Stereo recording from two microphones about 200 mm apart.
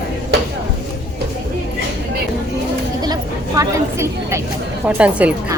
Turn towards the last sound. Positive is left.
turn(degrees=-5)  # may be behind; listen again after turning